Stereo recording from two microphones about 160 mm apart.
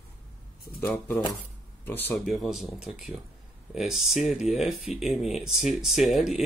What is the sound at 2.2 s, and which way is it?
Speech, centre (ahead or behind).